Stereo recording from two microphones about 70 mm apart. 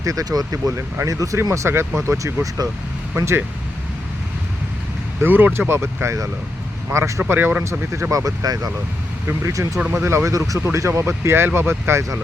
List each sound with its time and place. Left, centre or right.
0.0 s speech: right
3.2 s speech: right
5.2 s speech: right
7.2 s speech: right
7.6 s speech: right
8.1 s speech: right
9.9 s speech: right